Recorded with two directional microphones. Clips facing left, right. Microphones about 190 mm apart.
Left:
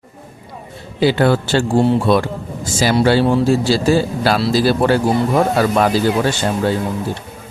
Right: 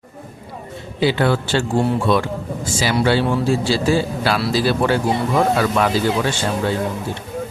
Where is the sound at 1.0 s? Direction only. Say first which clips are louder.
Left 3 dB; 40° left (ahead or behind).